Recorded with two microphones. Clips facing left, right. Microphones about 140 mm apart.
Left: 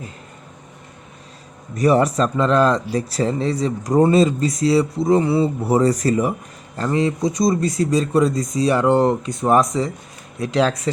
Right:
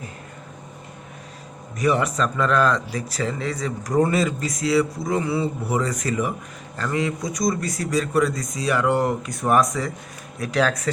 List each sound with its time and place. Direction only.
1.7 s speech: 35° left (ahead or behind)